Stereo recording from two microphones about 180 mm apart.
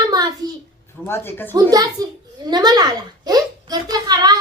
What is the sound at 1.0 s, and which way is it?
Speech, 10° left (ahead or behind).